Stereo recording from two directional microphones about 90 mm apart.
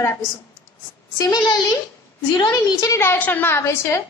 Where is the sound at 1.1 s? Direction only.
45° left (ahead or behind).